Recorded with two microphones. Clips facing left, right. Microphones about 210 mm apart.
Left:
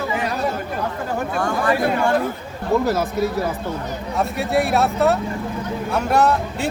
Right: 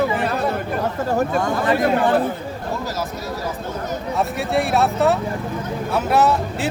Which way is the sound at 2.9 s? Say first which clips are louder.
Left 7 dB; 60° left (ahead or behind).